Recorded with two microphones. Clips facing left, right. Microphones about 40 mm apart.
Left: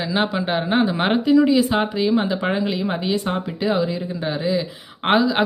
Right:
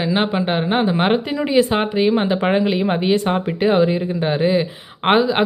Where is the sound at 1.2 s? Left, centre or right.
Right.